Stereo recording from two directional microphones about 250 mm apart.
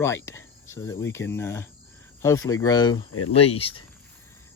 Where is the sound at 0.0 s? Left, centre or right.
Centre.